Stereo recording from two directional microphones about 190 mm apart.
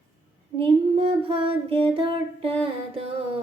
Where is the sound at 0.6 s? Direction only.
30° right (ahead or behind).